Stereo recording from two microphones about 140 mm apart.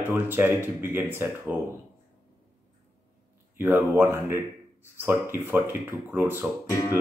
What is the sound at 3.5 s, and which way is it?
Speech, 15° right (ahead or behind).